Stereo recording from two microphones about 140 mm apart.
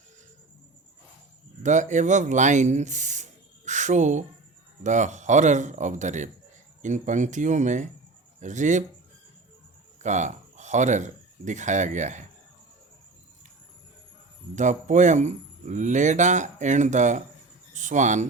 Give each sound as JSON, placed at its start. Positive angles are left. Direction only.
{"t": 1.6, "sound": "speech", "side_deg": -60}
{"t": 3.7, "sound": "a sound", "side_deg": -60}
{"t": 4.8, "sound": "speech", "side_deg": -60}
{"t": 10.0, "sound": "speech", "side_deg": -60}
{"t": 14.5, "sound": "speech", "side_deg": -60}